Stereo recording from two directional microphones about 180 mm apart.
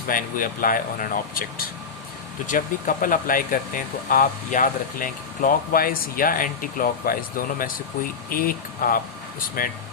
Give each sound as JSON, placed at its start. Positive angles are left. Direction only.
{"t": 0.1, "sound": "speech", "side_deg": 50}